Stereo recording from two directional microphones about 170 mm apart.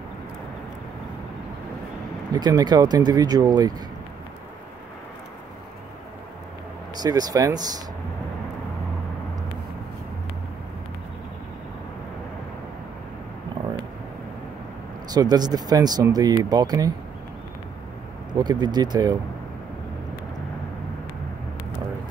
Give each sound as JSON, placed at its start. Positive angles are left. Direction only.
{"t": 2.3, "sound": "speech", "side_deg": -25}
{"t": 7.0, "sound": "speech", "side_deg": -20}
{"t": 15.0, "sound": "speech", "side_deg": -25}
{"t": 18.4, "sound": "speech", "side_deg": -25}